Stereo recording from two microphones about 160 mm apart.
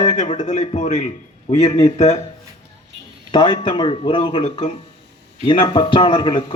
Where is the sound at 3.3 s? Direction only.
30° left (ahead or behind).